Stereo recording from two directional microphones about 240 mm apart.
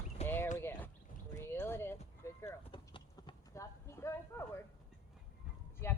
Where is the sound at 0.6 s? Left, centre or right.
Centre.